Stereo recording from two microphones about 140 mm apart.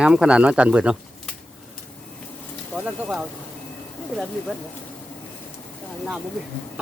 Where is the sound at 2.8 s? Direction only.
Centre (ahead or behind).